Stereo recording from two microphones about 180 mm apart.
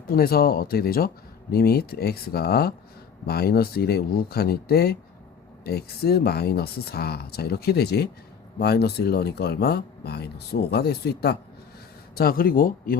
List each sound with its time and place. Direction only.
0.1 s speech: 55° left (ahead or behind)